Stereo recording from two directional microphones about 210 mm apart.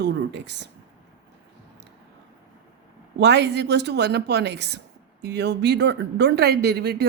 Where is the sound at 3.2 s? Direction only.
55° right (ahead or behind).